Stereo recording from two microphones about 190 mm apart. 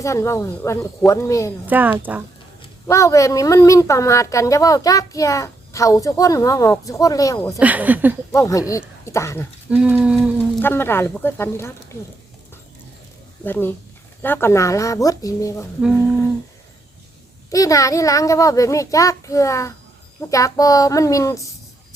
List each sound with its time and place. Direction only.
0.0 s a woman's voice: 15° left (ahead or behind)
1.6 s speech: 10° right (ahead or behind)
2.6 s a woman's voice: 20° left (ahead or behind)
7.6 s speech: 10° right (ahead or behind)
8.3 s a woman's voice: 15° left (ahead or behind)
9.6 s a sound: 5° right (ahead or behind)
10.6 s a woman's voice: 10° left (ahead or behind)
13.4 s a woman's voice: 10° left (ahead or behind)
17.5 s a woman's voice: 15° left (ahead or behind)